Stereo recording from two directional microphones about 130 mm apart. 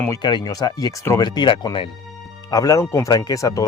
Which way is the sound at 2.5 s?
25° left (ahead or behind).